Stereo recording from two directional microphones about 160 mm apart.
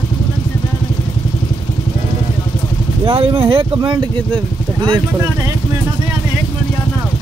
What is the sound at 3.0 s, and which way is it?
Speech, 35° right (ahead or behind).